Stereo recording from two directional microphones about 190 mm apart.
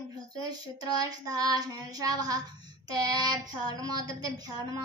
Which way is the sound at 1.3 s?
20° right (ahead or behind).